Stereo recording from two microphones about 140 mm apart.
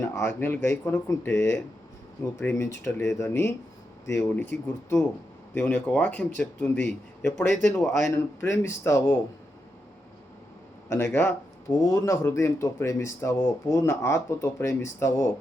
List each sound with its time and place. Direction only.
0.0 s speech: 15° left (ahead or behind)
5.5 s speech: 10° left (ahead or behind)
7.5 s speech: 5° left (ahead or behind)
7.9 s speech: 20° left (ahead or behind)
10.9 s speech: 15° left (ahead or behind)